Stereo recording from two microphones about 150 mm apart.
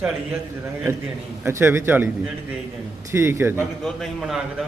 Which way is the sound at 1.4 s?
15° right (ahead or behind).